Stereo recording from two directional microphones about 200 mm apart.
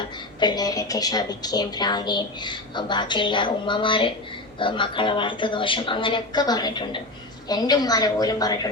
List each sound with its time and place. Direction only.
0.3 s a woman's voice: 20° left (ahead or behind)